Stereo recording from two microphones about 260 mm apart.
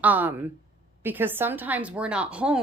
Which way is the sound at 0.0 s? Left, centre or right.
Centre.